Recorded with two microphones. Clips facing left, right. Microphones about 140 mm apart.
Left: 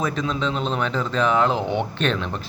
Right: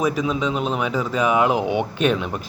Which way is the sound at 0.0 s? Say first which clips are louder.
Right 3 dB; 10° right (ahead or behind).